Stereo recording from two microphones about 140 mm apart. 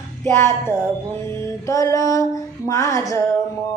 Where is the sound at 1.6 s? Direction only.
25° left (ahead or behind).